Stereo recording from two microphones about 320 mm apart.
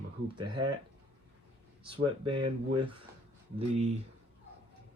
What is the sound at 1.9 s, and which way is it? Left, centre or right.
Speech, centre.